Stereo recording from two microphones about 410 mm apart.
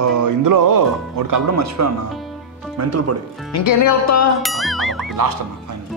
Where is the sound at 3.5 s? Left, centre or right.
Left.